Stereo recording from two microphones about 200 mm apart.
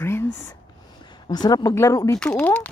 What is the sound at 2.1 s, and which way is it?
Speech, 5° left (ahead or behind).